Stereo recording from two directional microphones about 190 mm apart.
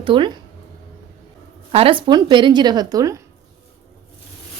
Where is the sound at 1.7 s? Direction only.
30° right (ahead or behind).